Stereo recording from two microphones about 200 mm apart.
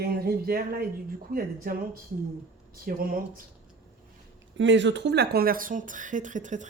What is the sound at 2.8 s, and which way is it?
Speech, 45° right (ahead or behind).